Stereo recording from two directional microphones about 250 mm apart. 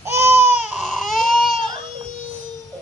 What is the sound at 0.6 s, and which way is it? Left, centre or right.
Baby cry, centre.